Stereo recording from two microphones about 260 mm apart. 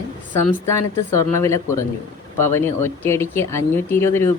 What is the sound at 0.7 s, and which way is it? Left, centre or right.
Speech, centre.